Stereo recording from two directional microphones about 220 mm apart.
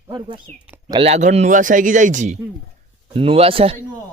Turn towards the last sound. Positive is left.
turn(degrees=-25)  # may be behind; listen again after turning